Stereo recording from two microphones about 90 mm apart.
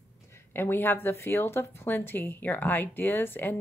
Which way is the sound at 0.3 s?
25° left (ahead or behind).